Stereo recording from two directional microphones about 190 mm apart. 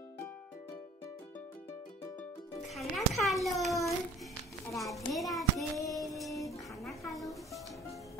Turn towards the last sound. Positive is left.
turn(degrees=0)  # may be behind; listen again after turning